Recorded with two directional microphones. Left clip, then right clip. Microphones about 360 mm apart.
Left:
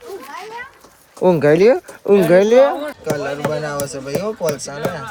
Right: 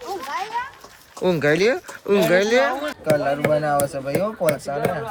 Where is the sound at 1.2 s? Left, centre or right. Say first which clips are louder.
Left 6 dB; centre.